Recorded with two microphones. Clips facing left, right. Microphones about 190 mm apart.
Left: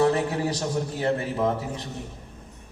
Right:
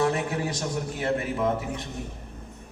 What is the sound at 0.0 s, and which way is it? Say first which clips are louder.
A man's voice: left 3 dB; 30° left (ahead or behind).